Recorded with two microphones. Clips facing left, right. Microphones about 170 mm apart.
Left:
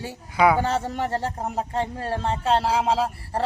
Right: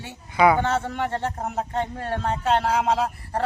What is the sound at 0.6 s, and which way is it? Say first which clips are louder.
Speech: even; 35° left (ahead or behind).